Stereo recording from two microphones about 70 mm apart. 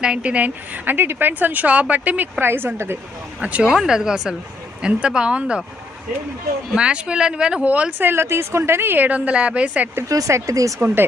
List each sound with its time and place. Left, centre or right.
0.0 s a woman's voice: centre; by 3.0 s right
3.4 s speech: right
3.7 s speech: centre
6.7 s speech: centre
10.1 s speech: right
10.8 s speech: right